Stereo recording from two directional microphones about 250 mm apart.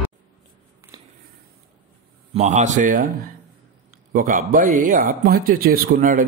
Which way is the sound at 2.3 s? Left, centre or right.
Right.